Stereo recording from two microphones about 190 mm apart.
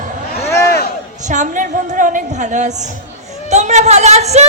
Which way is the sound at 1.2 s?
40° right (ahead or behind).